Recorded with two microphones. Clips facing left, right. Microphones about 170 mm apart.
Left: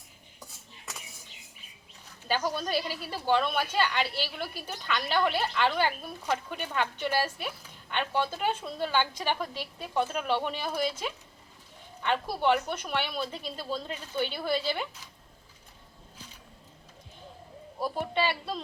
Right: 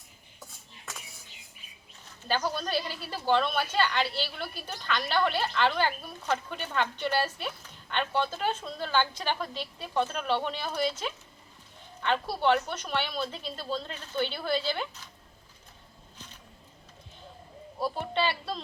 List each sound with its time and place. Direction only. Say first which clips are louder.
2.2 s a woman's voice: even; 10° left (ahead or behind)
17.7 s a woman's voice: even; 10° left (ahead or behind)